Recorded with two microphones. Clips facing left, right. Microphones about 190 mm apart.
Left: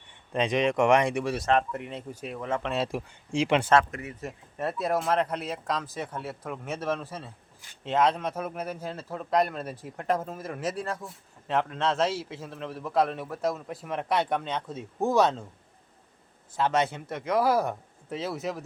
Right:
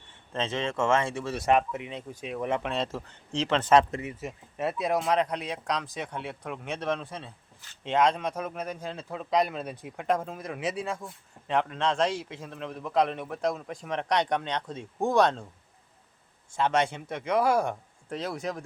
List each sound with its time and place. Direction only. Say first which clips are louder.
0.1 s speech: left 5 dB; 15° left (ahead or behind)
1.7 s speech: left 1 dB; centre (ahead or behind)
4.2 s speech: left 2 dB; centre (ahead or behind)
16.6 s speech: even; 5° left (ahead or behind)